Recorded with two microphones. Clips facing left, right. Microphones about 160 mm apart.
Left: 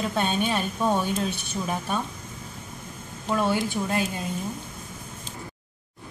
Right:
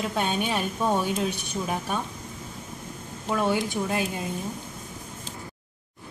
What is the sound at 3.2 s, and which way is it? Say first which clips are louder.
A woman's voice: left 1 dB; 15° right (ahead or behind).